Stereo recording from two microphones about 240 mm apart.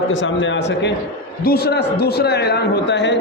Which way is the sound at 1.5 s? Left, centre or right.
Left.